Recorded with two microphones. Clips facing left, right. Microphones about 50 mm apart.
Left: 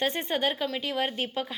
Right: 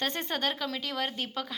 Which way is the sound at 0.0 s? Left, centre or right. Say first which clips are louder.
Left 4 dB; centre.